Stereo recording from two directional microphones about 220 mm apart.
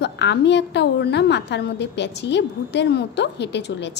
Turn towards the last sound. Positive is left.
turn(degrees=50)  # may be behind; listen again after turning